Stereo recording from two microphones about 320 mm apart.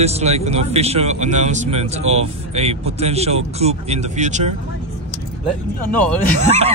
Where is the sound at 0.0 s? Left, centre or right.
Centre.